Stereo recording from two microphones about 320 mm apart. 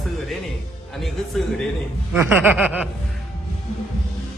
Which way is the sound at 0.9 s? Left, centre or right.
Centre.